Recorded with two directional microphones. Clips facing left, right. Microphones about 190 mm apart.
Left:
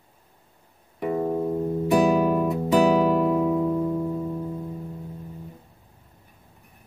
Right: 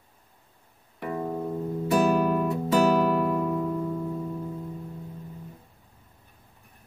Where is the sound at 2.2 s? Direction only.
10° left (ahead or behind).